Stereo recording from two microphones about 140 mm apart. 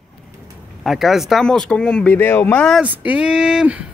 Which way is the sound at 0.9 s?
Centre (ahead or behind).